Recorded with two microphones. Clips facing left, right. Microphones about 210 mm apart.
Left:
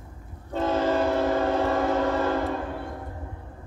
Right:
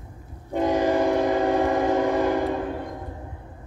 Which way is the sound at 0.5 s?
15° right (ahead or behind).